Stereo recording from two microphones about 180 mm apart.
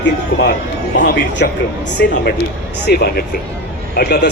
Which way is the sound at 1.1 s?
55° left (ahead or behind).